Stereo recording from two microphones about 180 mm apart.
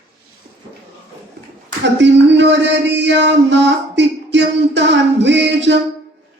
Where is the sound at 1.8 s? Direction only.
85° right.